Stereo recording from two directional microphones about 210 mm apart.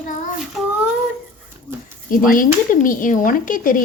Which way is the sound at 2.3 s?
40° left (ahead or behind).